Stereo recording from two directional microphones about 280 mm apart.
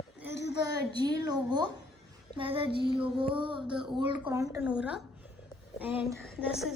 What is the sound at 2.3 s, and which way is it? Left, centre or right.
Female singing, centre.